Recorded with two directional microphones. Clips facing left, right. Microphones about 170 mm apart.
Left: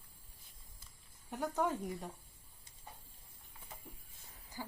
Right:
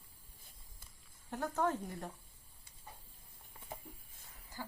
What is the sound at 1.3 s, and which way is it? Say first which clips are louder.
Speech: even; 10° left (ahead or behind).